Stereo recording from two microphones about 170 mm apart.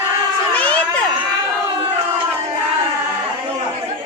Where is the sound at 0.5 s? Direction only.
10° left (ahead or behind).